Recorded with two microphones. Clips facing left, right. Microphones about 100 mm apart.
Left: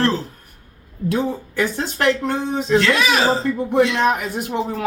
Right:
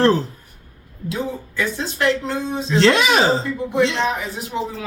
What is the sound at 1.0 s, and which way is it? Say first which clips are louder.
Speech: left 4 dB; 55° left (ahead or behind).